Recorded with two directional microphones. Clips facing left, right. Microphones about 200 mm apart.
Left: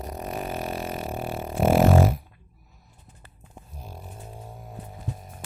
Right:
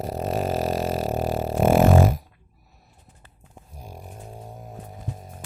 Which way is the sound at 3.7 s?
15° right (ahead or behind).